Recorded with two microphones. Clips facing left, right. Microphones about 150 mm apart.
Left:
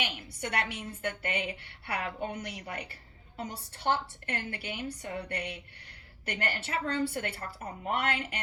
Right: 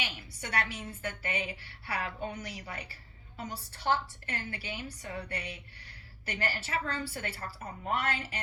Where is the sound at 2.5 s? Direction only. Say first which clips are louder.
Left 3 dB; 60° left (ahead or behind).